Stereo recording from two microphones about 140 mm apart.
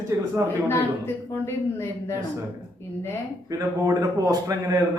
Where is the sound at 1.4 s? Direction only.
20° left (ahead or behind).